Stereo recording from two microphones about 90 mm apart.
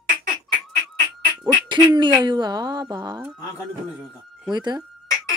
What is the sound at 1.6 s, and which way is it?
Speech, 60° right (ahead or behind).